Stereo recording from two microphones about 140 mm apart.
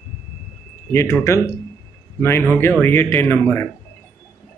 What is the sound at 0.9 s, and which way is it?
Speech, 20° left (ahead or behind).